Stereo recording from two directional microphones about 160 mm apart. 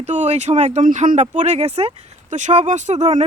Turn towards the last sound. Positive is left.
turn(degrees=-45)  # may be behind; listen again after turning